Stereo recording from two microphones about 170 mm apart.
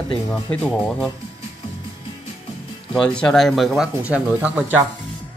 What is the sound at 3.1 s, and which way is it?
Speech, 5° left (ahead or behind).